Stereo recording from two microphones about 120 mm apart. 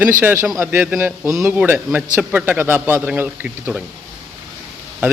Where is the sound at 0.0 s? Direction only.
15° right (ahead or behind).